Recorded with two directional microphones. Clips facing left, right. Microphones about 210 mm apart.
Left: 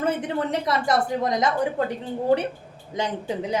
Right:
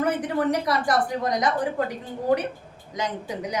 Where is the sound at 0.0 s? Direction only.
25° left (ahead or behind).